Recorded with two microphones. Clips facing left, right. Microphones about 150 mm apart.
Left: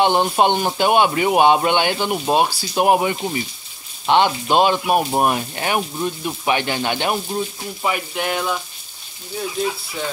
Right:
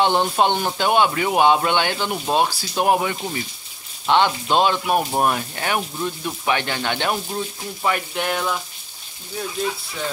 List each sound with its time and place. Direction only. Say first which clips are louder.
0.0 s speech: left 2 dB; 15° left (ahead or behind)